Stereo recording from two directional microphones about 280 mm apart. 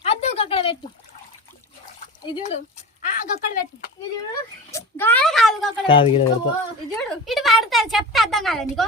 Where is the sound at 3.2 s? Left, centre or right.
Left.